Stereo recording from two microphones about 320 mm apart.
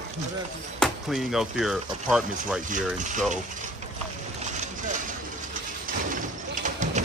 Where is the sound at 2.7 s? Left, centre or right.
Right.